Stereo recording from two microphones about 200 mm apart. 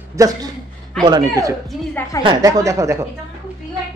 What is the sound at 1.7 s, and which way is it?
Speech, centre (ahead or behind).